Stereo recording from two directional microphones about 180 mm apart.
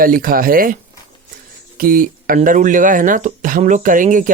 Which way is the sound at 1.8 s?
50° right (ahead or behind).